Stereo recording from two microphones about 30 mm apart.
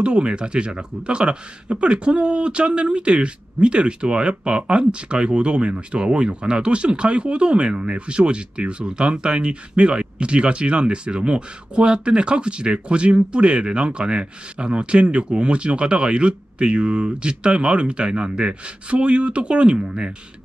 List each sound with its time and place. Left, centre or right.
0.0 s speech: right